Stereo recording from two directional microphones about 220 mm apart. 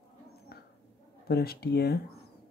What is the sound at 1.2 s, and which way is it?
Speech, 45° left (ahead or behind).